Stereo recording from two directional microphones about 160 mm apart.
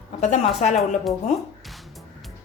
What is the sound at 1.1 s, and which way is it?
Speech, centre (ahead or behind).